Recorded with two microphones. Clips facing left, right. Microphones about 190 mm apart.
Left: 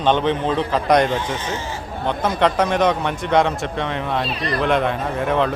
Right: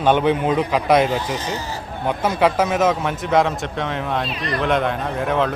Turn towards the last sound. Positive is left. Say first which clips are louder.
# left 1 dB
turn(degrees=0)  # may be behind; listen again after turning